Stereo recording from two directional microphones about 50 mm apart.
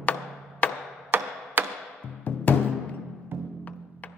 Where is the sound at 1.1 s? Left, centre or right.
Right.